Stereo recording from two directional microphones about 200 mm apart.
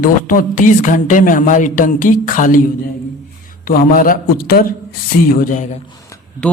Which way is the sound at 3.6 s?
45° left (ahead or behind).